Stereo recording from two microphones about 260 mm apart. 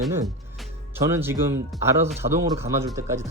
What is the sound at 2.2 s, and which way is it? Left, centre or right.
Speech, right.